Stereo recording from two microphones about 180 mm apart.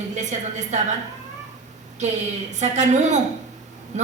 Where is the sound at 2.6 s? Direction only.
40° right (ahead or behind).